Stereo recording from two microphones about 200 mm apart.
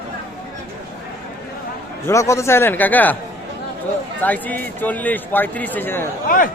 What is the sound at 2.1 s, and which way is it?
A man's voice, 15° left (ahead or behind).